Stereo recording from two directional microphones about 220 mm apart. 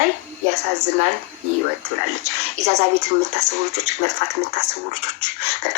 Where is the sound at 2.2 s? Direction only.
30° right (ahead or behind).